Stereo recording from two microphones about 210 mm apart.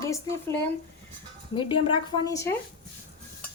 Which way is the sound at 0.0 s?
15° left (ahead or behind).